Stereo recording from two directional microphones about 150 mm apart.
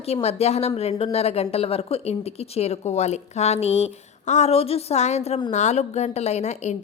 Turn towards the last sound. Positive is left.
turn(degrees=50)  # may be behind; listen again after turning